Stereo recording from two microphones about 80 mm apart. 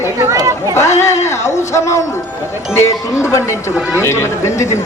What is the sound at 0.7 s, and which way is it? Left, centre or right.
Speech, left.